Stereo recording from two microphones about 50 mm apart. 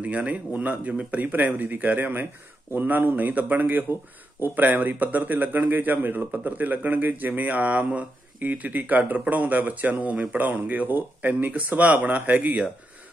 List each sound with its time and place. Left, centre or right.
0.0 s a man's voice: right